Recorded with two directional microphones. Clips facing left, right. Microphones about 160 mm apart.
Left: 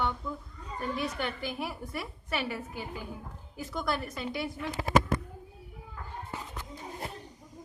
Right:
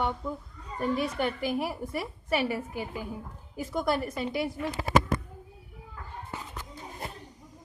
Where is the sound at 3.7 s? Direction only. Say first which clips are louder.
Right 5 dB; 40° right (ahead or behind).